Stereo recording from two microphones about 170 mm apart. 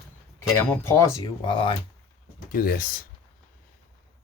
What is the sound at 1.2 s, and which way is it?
Speech, 30° left (ahead or behind).